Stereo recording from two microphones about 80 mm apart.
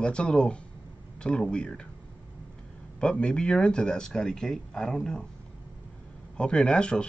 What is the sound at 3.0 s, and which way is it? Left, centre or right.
Speech, centre.